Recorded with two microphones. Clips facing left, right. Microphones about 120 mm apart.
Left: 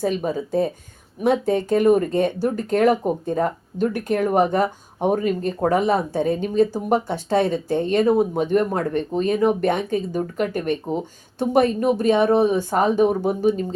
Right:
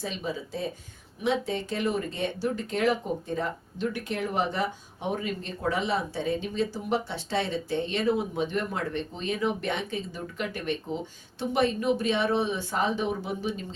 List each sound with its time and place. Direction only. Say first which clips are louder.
0.0 s speech: left 10 dB; 50° left (ahead or behind)